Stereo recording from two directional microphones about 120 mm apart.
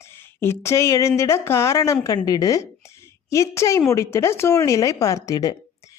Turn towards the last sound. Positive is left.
turn(degrees=30)  # may be behind; listen again after turning